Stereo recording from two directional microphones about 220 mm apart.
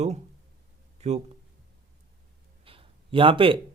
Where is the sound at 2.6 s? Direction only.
25° right (ahead or behind).